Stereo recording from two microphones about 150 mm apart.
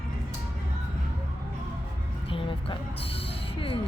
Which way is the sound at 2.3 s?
35° left (ahead or behind).